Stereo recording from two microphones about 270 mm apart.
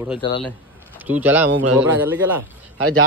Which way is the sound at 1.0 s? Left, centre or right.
Centre.